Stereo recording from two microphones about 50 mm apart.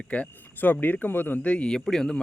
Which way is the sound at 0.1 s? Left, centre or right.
Left.